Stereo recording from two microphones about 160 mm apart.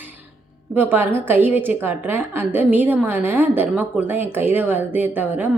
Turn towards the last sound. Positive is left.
turn(degrees=-10)  # may be behind; listen again after turning